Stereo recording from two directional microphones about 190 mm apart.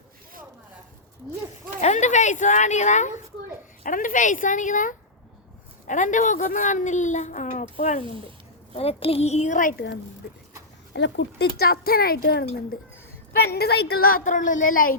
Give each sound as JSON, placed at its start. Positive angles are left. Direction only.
{"t": 1.8, "sound": "a woman's voice", "side_deg": 40}
{"t": 10.9, "sound": "speech", "side_deg": 65}
{"t": 13.5, "sound": "a woman's voice", "side_deg": 60}